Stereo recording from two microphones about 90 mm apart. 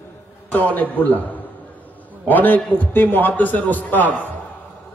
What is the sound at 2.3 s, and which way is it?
A man's voice, 20° left (ahead or behind).